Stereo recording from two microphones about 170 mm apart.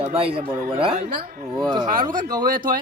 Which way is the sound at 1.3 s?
55° right (ahead or behind).